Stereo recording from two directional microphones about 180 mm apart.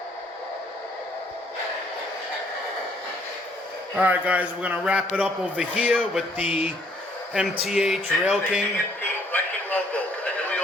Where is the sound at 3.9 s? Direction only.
10° right (ahead or behind).